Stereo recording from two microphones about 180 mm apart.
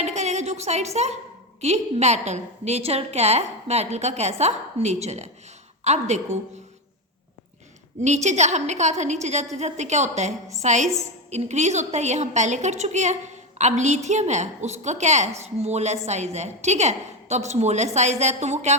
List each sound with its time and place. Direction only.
0.0 s a sound: 40° right (ahead or behind)
1.6 s a woman's voice: 40° right (ahead or behind)
8.0 s a woman's voice: 40° right (ahead or behind)